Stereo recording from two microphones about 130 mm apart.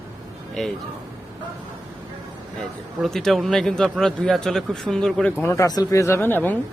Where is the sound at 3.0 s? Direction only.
Centre (ahead or behind).